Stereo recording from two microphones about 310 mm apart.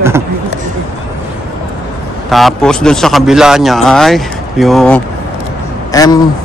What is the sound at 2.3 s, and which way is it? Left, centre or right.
A man's voice, centre.